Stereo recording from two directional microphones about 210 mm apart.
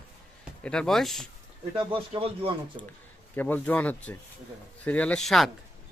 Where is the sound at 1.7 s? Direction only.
25° right (ahead or behind).